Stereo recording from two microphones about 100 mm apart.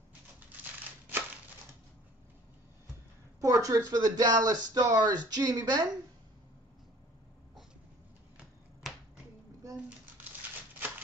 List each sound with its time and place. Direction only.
3.3 s speech: 35° right (ahead or behind)